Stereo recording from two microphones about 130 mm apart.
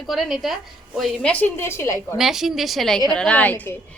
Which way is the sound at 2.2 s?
5° right (ahead or behind).